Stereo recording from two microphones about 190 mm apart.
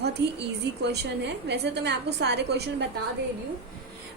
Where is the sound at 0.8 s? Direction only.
65° right (ahead or behind).